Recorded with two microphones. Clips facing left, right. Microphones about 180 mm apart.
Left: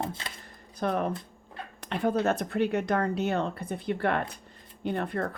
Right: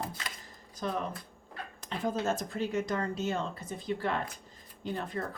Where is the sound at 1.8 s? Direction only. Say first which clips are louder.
Left 6 dB; 65° left (ahead or behind).